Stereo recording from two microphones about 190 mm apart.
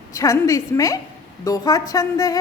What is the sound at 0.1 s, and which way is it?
A woman's voice, 15° left (ahead or behind).